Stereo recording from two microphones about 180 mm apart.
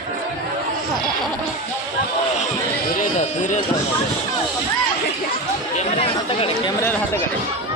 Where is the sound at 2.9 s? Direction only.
45° left (ahead or behind).